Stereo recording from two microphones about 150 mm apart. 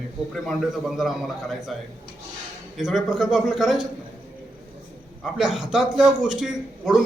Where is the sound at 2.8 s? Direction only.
5° right (ahead or behind).